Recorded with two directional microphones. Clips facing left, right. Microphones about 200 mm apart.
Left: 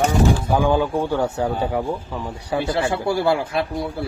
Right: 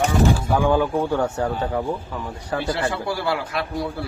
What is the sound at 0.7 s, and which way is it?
Speech, 10° left (ahead or behind).